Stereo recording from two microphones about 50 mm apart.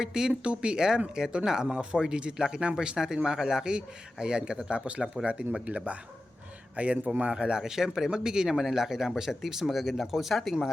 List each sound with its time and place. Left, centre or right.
0.0 s a man's voice: centre